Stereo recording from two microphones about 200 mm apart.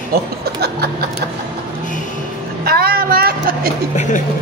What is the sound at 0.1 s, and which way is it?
Speech, 50° right (ahead or behind).